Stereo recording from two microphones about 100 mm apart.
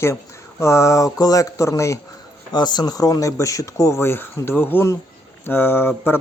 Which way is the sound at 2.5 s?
45° left (ahead or behind).